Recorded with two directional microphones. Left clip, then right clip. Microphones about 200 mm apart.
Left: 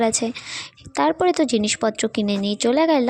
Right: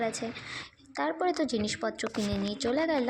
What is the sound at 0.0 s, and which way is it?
A woman's voice, 60° left (ahead or behind).